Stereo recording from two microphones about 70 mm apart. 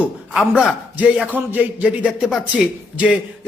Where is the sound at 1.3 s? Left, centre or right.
Right.